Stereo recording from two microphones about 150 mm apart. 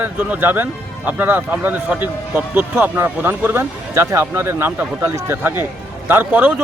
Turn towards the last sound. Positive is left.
turn(degrees=-10)  # may be behind; listen again after turning